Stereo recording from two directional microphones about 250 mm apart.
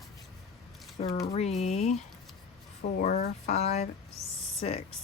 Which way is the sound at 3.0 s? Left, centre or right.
Left.